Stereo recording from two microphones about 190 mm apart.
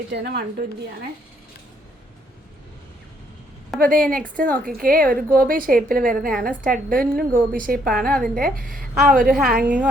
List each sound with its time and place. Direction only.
0.1 s a woman's voice: 60° right (ahead or behind)
3.8 s a woman's voice: 50° right (ahead or behind)
9.6 s a woman's voice: 5° right (ahead or behind)